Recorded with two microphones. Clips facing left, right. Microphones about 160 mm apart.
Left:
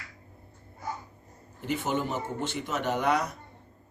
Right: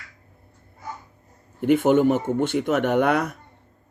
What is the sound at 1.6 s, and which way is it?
Speech, 55° right (ahead or behind).